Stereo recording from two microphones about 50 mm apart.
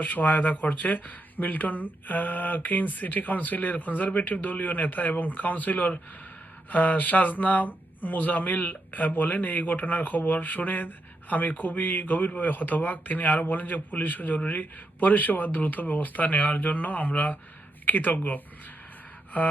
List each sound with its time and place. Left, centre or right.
0.0 s speech: left